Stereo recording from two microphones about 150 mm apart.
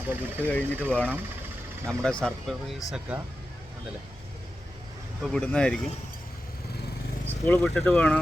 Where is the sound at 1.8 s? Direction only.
5° left (ahead or behind).